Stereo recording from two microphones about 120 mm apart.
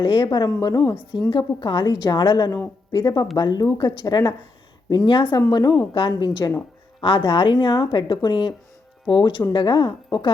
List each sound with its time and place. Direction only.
0.0 s a woman's voice: 40° left (ahead or behind)